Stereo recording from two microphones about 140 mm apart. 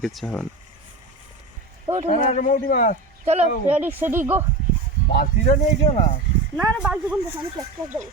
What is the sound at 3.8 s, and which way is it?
Speech, 15° right (ahead or behind).